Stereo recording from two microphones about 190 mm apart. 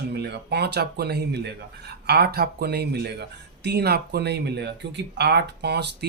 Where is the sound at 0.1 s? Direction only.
60° right (ahead or behind).